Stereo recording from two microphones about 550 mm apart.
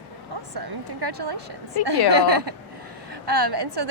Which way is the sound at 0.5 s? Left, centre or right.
Right.